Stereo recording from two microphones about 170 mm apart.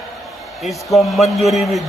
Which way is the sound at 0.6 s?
Centre (ahead or behind).